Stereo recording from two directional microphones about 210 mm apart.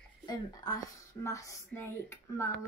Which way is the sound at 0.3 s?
15° left (ahead or behind).